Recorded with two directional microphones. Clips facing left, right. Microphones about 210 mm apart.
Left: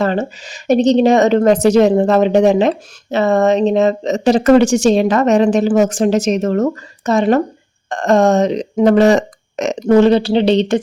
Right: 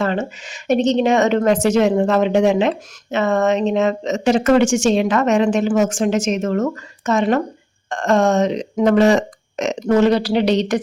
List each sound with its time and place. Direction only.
0.0 s a woman's voice: 35° left (ahead or behind)